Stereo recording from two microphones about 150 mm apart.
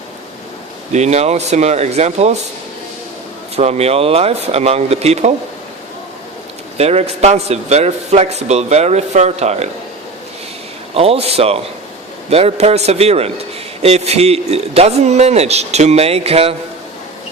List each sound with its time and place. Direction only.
0.9 s a man's voice: 50° right (ahead or behind)
3.5 s a man's voice: 45° right (ahead or behind)
6.7 s a man's voice: 45° right (ahead or behind)
10.9 s a man's voice: 40° right (ahead or behind)